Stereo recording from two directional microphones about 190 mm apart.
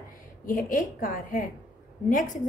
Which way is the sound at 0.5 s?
45° left (ahead or behind).